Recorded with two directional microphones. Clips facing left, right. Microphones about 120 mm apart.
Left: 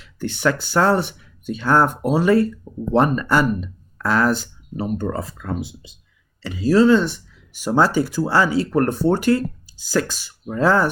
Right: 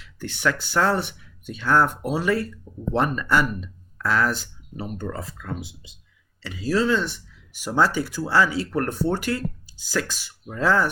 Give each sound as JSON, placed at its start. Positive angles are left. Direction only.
{"t": 0.0, "sound": "speech", "side_deg": 35}